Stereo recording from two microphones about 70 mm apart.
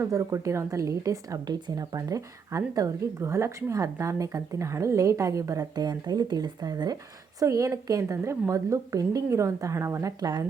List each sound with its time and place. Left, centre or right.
0.0 s speech: right
1.5 s speech: right
5.7 s speech: right
10.2 s speech: right